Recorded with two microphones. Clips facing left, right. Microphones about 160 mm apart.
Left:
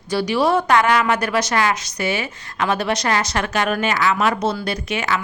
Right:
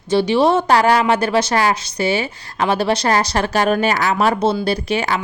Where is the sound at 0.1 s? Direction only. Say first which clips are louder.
Right 4 dB; 25° right (ahead or behind).